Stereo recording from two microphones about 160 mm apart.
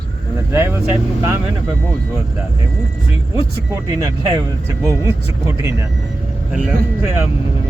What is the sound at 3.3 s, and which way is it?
Speech, 20° right (ahead or behind).